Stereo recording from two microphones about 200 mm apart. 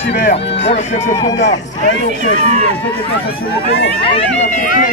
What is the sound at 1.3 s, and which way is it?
Speech, 65° left (ahead or behind).